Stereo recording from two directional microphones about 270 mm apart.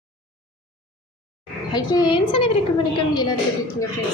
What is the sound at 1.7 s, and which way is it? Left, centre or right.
Speech, centre.